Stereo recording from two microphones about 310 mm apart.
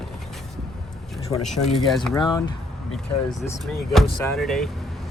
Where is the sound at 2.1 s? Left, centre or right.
Centre.